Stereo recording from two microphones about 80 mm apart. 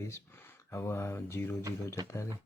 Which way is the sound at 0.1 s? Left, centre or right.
Left.